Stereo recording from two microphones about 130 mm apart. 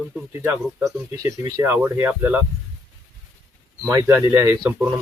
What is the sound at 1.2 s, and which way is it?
Speech, 25° right (ahead or behind).